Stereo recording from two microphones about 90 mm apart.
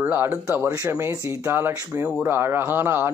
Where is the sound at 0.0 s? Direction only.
20° right (ahead or behind).